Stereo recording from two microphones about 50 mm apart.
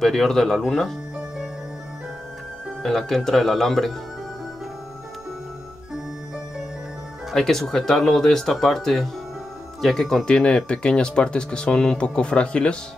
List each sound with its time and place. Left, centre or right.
0.0 s speech: centre
2.8 s speech: centre
7.3 s speech: centre
10.3 s speech: centre